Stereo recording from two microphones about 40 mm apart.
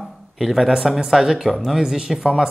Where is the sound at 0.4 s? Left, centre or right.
Centre.